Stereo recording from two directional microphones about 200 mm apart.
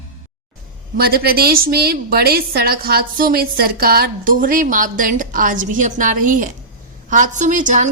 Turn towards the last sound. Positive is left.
turn(degrees=-40)  # may be behind; listen again after turning